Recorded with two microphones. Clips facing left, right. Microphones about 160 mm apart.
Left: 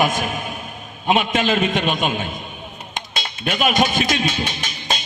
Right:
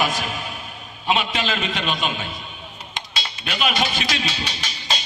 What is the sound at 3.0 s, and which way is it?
Music, 50° left (ahead or behind).